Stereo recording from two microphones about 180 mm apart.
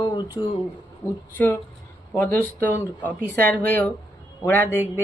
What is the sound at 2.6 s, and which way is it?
Speech, 10° left (ahead or behind).